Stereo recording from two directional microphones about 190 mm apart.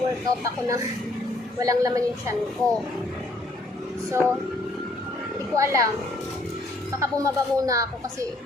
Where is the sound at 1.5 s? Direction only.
15° right (ahead or behind).